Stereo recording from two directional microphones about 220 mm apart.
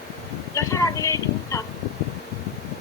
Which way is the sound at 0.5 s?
15° left (ahead or behind).